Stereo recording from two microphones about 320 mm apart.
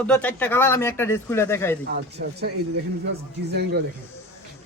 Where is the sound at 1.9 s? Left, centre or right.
Right.